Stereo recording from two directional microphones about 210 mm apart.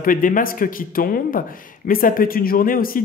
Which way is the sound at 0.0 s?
40° left (ahead or behind).